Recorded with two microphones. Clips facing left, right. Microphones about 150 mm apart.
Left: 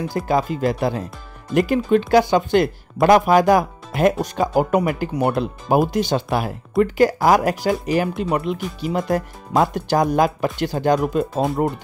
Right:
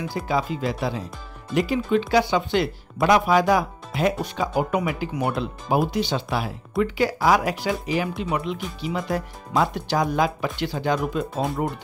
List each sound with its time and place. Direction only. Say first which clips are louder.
0.3 s speech: left 5 dB; 50° left (ahead or behind)